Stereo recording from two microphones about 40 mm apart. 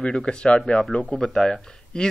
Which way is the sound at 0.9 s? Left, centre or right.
Left.